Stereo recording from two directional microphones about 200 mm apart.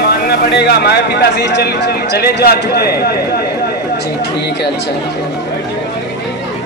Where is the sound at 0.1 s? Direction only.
50° left (ahead or behind).